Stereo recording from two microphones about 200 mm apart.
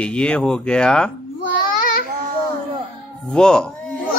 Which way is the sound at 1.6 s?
45° left (ahead or behind).